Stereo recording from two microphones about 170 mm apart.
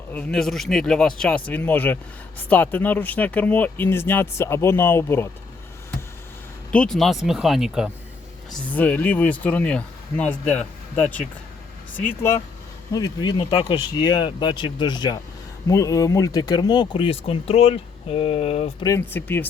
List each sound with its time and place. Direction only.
0.1 s speech: 5° left (ahead or behind)
6.7 s speech: 5° left (ahead or behind)
8.4 s speech: 10° left (ahead or behind); by 18.9 s 35° left (ahead or behind)
18.9 s speech: 15° left (ahead or behind)